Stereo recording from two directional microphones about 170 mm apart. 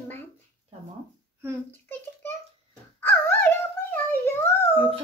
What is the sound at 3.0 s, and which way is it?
Dog, 15° left (ahead or behind).